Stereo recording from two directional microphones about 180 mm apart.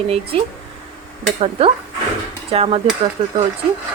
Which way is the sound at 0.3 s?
30° right (ahead or behind).